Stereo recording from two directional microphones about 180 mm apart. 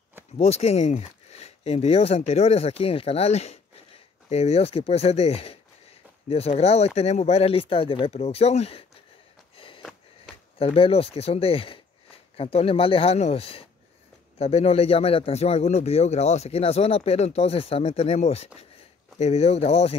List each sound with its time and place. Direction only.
0.4 s speech: 35° left (ahead or behind)
9.8 s sniff: 5° left (ahead or behind)
10.6 s speech: 30° left (ahead or behind)